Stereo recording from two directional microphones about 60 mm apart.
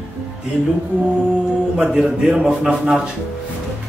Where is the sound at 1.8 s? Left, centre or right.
Centre.